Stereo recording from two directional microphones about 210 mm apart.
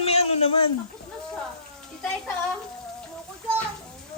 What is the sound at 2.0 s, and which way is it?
Speech, 5° left (ahead or behind).